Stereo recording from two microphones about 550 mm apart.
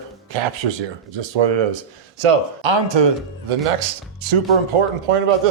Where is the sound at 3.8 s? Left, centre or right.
Right.